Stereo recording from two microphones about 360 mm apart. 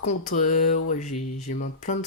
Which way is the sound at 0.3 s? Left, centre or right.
Left.